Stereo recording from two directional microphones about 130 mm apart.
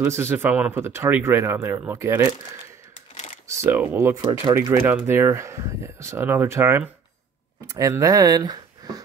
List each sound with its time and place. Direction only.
0.0 s speech: 20° right (ahead or behind)
3.4 s speech: 20° right (ahead or behind)
4.2 s speech: 40° right (ahead or behind)
4.6 s speech: 15° right (ahead or behind)